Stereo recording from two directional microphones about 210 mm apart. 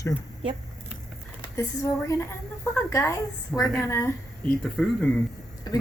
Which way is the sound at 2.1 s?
10° left (ahead or behind).